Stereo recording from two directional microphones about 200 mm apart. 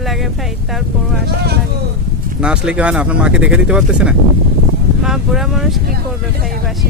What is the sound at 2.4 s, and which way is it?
Speech, 5° right (ahead or behind).